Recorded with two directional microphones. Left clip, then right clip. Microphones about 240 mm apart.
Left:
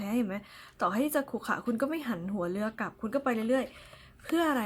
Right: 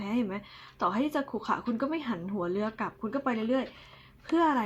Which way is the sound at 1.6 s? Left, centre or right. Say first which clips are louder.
Left 1 dB; left.